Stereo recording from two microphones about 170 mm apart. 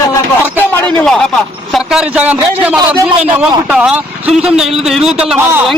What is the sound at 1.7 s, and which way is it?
A man's voice, 5° right (ahead or behind).